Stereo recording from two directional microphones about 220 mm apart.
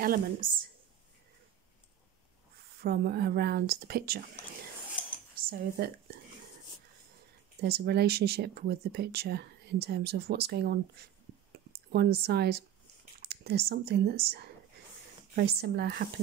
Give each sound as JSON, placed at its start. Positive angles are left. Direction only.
{"t": 0.0, "sound": "a woman's voice", "side_deg": -40}
{"t": 2.8, "sound": "speech", "side_deg": -45}
{"t": 5.3, "sound": "speech", "side_deg": -45}
{"t": 7.6, "sound": "speech", "side_deg": -45}